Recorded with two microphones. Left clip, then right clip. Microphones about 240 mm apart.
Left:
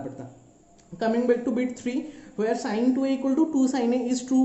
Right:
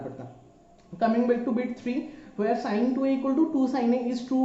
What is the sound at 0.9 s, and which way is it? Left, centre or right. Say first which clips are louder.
A man's voice: left 1 dB; left.